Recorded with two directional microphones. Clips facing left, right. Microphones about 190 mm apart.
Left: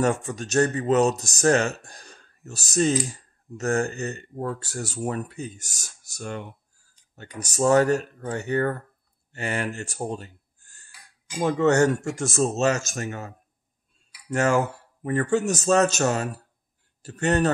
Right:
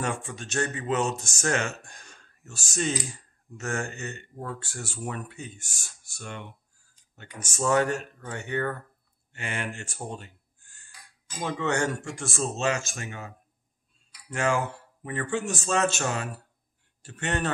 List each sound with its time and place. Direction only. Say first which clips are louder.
0.0 s speech: left 8 dB; 40° left (ahead or behind)
14.3 s speech: left 5 dB; 40° left (ahead or behind)